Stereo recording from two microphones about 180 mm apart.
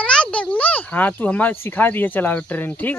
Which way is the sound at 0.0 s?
5° left (ahead or behind).